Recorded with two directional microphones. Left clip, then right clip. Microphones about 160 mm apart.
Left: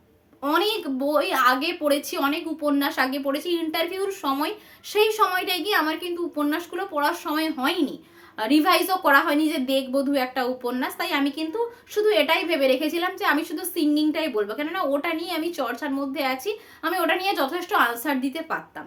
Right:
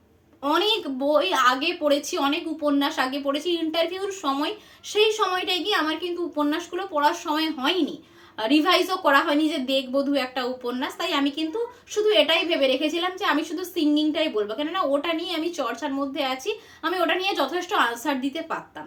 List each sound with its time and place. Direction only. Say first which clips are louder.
0.4 s a woman's voice: right 1 dB; 20° left (ahead or behind)